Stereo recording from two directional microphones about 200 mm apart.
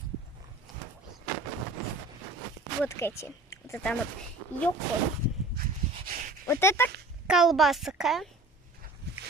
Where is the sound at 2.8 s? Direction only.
10° left (ahead or behind).